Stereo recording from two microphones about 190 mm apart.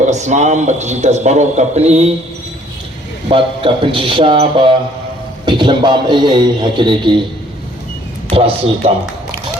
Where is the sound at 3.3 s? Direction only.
30° right (ahead or behind).